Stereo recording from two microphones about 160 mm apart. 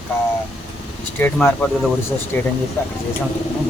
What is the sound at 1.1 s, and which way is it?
Speech, 15° left (ahead or behind).